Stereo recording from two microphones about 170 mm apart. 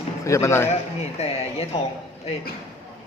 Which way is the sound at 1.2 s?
40° left (ahead or behind).